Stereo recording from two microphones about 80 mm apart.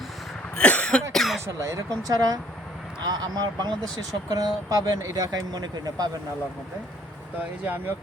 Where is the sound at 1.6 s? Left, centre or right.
Right.